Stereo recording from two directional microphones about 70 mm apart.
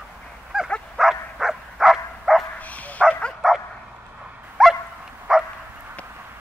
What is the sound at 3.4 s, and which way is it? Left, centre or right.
Bow-wow, centre.